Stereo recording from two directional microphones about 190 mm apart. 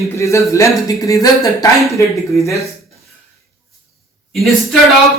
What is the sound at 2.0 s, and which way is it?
Speech, 15° left (ahead or behind).